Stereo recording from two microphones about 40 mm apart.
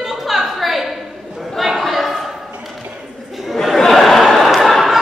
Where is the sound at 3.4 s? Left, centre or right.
Centre.